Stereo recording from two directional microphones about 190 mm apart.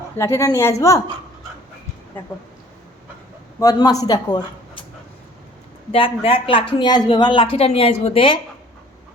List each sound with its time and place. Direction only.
0.2 s a woman's voice: 15° left (ahead or behind)
2.2 s a woman's voice: 10° left (ahead or behind)
3.6 s a woman's voice: 20° left (ahead or behind)
5.9 s a woman's voice: 30° left (ahead or behind)